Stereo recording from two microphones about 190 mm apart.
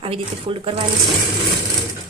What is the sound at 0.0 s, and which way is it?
Speech, 30° right (ahead or behind).